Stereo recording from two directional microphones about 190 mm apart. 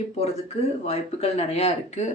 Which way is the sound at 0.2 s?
30° left (ahead or behind).